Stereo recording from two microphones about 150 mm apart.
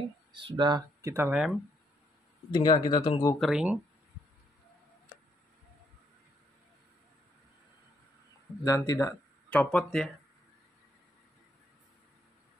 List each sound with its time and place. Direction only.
0.3 s speech: 30° right (ahead or behind)
1.0 s speech: 15° right (ahead or behind)
2.5 s speech: 30° left (ahead or behind)
3.3 s speech: centre (ahead or behind)
8.6 s speech: 20° left (ahead or behind)
9.5 s speech: 5° left (ahead or behind)